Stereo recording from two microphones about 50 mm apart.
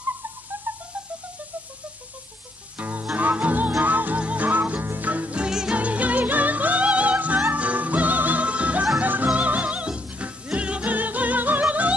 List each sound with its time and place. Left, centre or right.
0.7 s music: right
2.8 s music: right
5.4 s music: centre
5.8 s music: right